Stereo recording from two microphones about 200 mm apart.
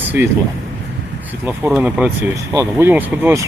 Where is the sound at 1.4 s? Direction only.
5° right (ahead or behind).